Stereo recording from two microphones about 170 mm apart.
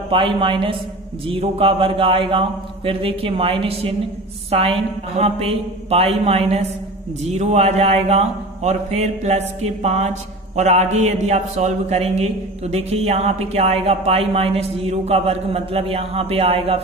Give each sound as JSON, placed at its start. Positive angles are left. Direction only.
{"t": 0.1, "sound": "a man's voice", "side_deg": -30}